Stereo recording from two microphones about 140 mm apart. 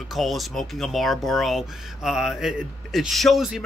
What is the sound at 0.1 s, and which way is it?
Speech, centre (ahead or behind).